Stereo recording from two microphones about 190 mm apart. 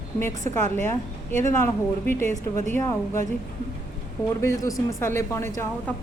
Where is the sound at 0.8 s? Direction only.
15° left (ahead or behind).